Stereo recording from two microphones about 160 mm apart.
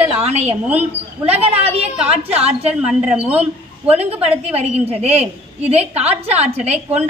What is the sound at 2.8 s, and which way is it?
Speech, 5° right (ahead or behind).